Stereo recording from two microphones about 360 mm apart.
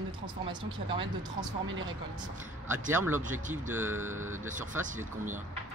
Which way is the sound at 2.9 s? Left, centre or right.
Centre.